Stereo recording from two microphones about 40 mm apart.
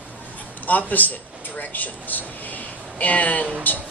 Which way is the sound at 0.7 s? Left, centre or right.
Left.